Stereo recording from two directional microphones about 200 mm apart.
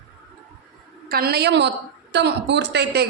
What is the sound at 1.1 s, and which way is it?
A woman's voice, 50° right (ahead or behind).